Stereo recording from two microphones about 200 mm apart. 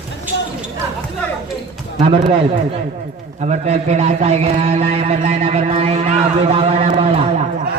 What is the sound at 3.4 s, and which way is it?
A man's voice, 35° right (ahead or behind).